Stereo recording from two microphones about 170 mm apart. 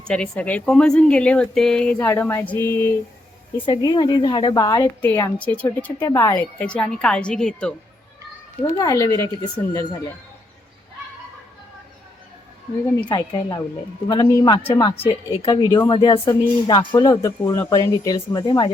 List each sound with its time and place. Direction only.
0.1 s speech: 5° left (ahead or behind)
3.7 s speech: 25° left (ahead or behind)
5.4 s speech: 10° left (ahead or behind)
6.6 s speech: 5° left (ahead or behind)
8.7 s speech: 20° left (ahead or behind)
13.0 s speech: 25° left (ahead or behind)